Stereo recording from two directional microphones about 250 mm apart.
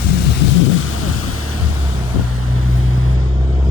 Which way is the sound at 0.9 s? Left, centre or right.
Left.